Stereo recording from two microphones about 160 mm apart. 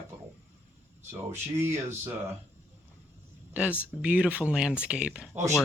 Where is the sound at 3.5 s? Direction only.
10° right (ahead or behind).